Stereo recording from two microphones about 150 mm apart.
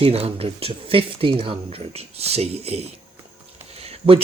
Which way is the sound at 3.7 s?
45° right (ahead or behind).